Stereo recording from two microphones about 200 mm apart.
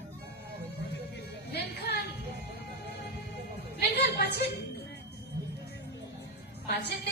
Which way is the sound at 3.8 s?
55° left (ahead or behind).